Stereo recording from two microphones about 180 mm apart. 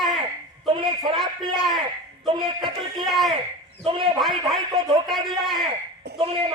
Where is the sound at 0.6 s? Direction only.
30° right (ahead or behind).